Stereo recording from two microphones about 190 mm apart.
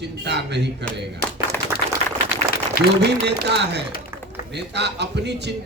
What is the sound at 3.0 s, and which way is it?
A man's voice, 65° right (ahead or behind).